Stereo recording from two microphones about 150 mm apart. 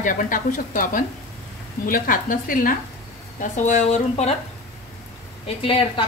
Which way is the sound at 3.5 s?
55° left (ahead or behind).